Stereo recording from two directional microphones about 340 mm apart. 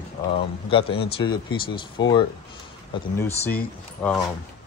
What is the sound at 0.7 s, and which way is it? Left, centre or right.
Speech, centre.